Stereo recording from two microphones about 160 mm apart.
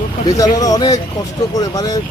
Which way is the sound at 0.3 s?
20° left (ahead or behind).